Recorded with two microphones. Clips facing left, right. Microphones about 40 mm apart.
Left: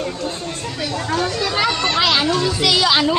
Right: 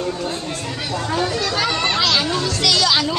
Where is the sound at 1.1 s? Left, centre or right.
Centre.